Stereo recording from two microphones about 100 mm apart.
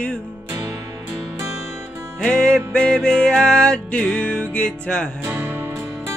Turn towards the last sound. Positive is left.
turn(degrees=-20)  # may be behind; listen again after turning